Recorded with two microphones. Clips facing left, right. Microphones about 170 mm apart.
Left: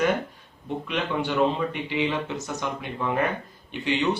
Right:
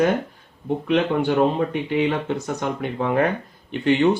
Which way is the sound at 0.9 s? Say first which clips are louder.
Right 8 dB; 50° right (ahead or behind).